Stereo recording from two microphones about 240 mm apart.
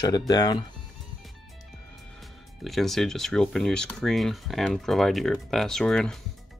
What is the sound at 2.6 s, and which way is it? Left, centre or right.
Speech, centre.